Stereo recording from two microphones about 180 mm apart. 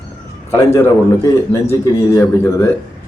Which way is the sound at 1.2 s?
15° left (ahead or behind).